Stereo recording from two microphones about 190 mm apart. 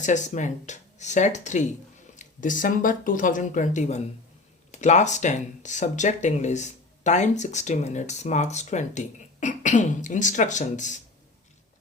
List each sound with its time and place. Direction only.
0.0 s speech: 40° left (ahead or behind)